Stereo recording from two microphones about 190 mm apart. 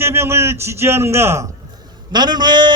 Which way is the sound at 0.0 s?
15° right (ahead or behind).